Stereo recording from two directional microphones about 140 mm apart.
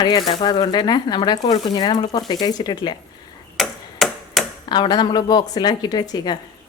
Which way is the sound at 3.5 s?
Centre (ahead or behind).